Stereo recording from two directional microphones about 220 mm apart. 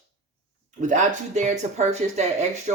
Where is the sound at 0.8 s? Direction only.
35° right (ahead or behind).